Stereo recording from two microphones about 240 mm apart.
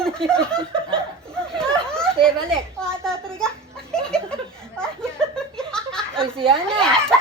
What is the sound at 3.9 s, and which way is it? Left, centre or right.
Laughter, centre.